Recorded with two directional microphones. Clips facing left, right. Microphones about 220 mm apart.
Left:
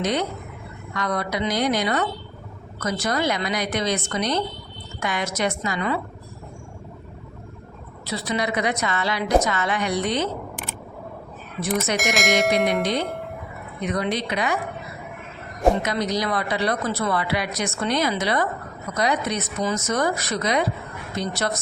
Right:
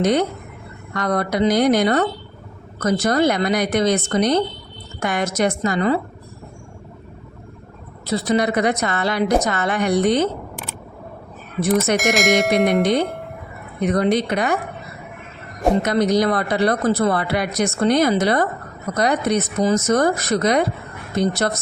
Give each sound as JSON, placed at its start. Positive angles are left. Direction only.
{"t": 0.0, "sound": "speech", "side_deg": -50}
{"t": 8.0, "sound": "speech", "side_deg": -50}
{"t": 11.9, "sound": "speech", "side_deg": 0}
{"t": 12.8, "sound": "speech", "side_deg": -55}
{"t": 15.8, "sound": "speech", "side_deg": -50}